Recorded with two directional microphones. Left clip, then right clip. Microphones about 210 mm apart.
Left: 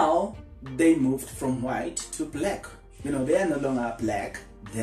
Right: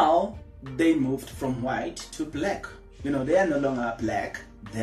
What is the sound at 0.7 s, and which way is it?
Speech, 5° right (ahead or behind).